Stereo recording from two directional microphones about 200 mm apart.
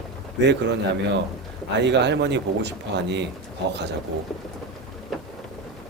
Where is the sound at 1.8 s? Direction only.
60° right (ahead or behind).